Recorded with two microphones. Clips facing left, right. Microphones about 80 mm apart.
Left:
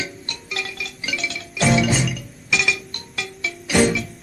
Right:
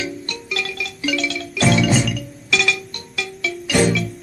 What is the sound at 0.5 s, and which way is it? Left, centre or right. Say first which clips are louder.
Music: right 3 dB; left.